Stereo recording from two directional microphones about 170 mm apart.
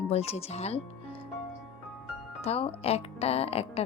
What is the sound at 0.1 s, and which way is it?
Speech, 35° left (ahead or behind).